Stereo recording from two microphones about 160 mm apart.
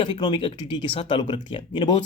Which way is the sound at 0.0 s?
30° left (ahead or behind).